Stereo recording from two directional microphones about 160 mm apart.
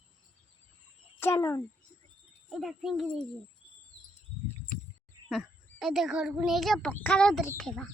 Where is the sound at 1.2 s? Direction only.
15° left (ahead or behind).